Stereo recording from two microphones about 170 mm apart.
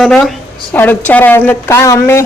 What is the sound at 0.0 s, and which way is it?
A woman's voice, centre (ahead or behind).